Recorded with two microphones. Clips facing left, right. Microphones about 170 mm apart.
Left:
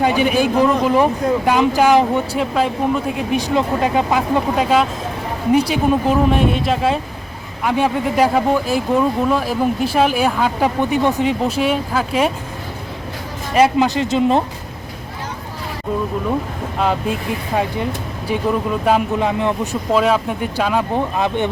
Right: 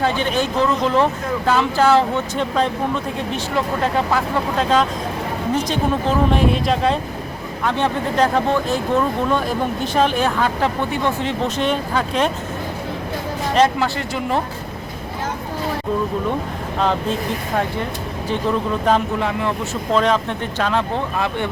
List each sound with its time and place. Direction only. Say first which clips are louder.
0.0 s speech: left 4 dB; 10° left (ahead or behind)
13.7 s speech: left 6 dB; 20° left (ahead or behind)
16.8 s speech: left 1 dB; 10° left (ahead or behind)
18.9 s speech: left 2 dB; 10° left (ahead or behind)